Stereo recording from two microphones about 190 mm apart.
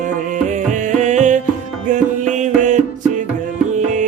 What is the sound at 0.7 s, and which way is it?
Music, 40° right (ahead or behind).